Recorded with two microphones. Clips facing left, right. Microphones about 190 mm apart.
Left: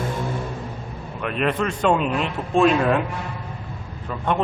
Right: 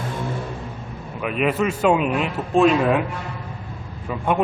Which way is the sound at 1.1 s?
5° right (ahead or behind).